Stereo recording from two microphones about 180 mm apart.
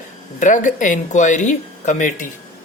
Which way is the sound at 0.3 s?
45° left (ahead or behind).